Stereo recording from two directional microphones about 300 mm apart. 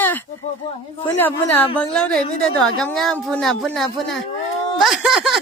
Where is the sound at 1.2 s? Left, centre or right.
Centre.